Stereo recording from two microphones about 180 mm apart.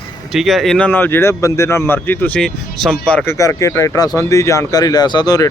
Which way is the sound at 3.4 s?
15° left (ahead or behind).